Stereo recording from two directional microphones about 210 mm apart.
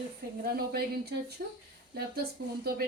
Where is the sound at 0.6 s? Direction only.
45° right (ahead or behind).